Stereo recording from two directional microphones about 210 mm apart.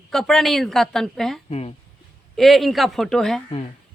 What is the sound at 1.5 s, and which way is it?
Speech, 30° left (ahead or behind).